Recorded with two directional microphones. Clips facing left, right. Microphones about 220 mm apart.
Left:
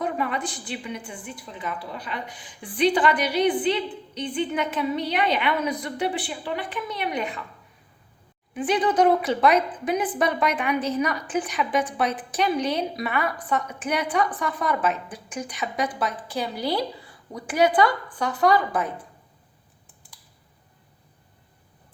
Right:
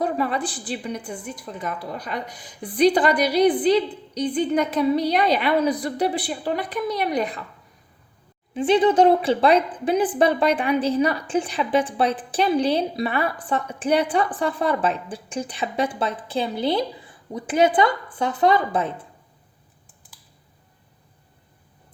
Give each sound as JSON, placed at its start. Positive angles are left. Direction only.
{"t": 0.0, "sound": "a woman's voice", "side_deg": -35}
{"t": 8.5, "sound": "a woman's voice", "side_deg": -25}